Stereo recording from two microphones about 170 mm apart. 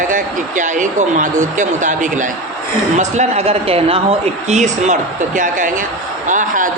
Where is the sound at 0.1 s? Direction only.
50° right (ahead or behind).